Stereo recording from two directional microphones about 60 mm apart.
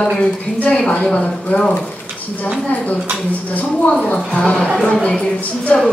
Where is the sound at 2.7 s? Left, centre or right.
Left.